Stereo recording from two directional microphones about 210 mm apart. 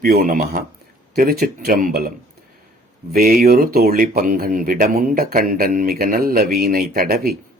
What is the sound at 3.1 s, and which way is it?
Speech, 45° right (ahead or behind).